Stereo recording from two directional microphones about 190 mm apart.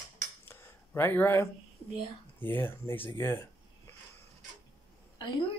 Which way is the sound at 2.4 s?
10° left (ahead or behind).